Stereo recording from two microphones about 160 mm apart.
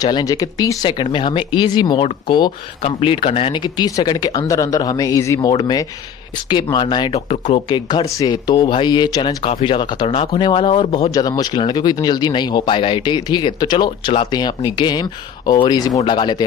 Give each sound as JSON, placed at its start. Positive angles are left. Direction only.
{"t": 0.0, "sound": "speech", "side_deg": 25}